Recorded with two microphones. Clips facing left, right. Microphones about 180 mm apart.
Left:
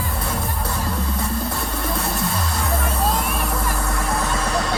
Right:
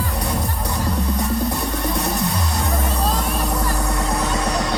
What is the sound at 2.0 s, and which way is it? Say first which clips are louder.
Music: right 2 dB; 20° right (ahead or behind).